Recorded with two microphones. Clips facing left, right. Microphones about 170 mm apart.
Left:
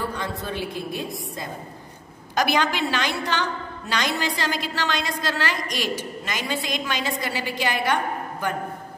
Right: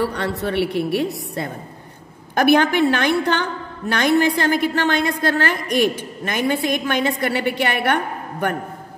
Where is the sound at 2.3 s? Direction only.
55° right (ahead or behind).